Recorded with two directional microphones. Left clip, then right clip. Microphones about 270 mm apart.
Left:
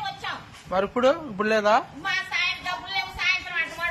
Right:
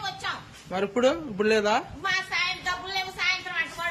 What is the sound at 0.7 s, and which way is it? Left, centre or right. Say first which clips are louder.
A man's voice: left 3 dB; centre.